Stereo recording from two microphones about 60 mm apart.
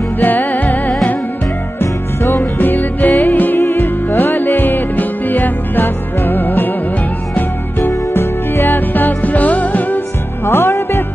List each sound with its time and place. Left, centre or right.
0.2 s music: left
1.8 s music: left
2.6 s music: left
3.6 s music: left
8.1 s music: left
10.4 s music: left